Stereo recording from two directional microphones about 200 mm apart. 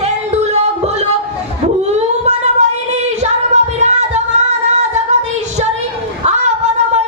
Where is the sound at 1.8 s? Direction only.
35° right (ahead or behind).